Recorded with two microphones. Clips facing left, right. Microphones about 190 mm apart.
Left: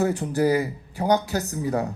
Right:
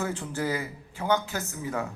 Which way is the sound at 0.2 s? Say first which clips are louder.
Left 9 dB; 35° left (ahead or behind).